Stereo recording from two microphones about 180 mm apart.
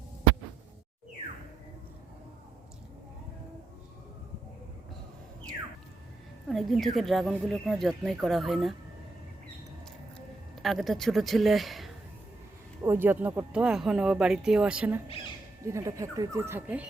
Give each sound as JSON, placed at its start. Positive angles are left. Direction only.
{"t": 6.5, "sound": "speech", "side_deg": 0}
{"t": 10.2, "sound": "speech", "side_deg": 0}
{"t": 12.8, "sound": "speech", "side_deg": -10}